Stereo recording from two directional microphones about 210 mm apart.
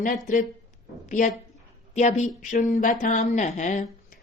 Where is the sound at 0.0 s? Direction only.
35° left (ahead or behind).